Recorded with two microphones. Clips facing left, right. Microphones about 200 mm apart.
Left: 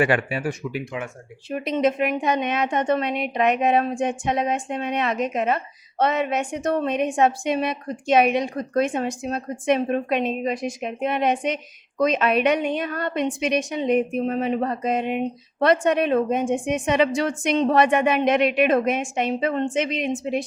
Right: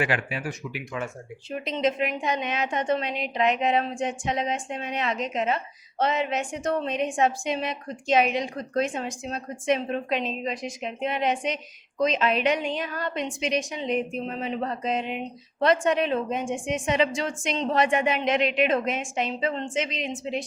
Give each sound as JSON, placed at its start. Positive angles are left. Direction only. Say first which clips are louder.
{"t": 1.5, "sound": "a woman's voice", "louder": "left 4 dB", "side_deg": 60}